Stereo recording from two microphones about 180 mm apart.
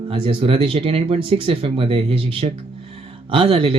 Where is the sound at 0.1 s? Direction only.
30° right (ahead or behind).